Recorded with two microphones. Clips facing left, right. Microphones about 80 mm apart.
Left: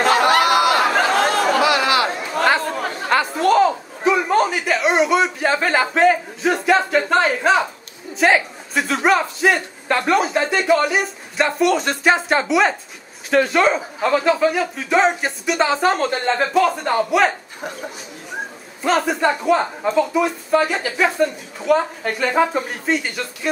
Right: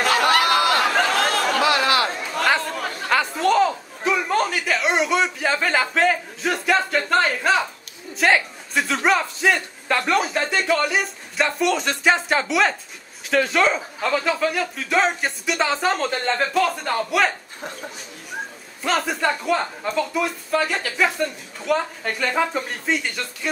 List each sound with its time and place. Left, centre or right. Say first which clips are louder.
0.0 s chatter: left 3 dB; centre
2.0 s chatter: left 3 dB; centre
3.1 s a sound: left 3 dB; centre
5.9 s a woman's voice: left 5 dB; centre
18.8 s a woman's voice: left 4 dB; centre